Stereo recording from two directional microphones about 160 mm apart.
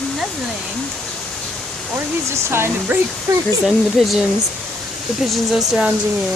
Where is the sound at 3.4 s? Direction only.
Centre (ahead or behind).